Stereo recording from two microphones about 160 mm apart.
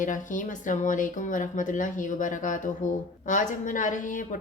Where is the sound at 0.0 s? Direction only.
55° left (ahead or behind).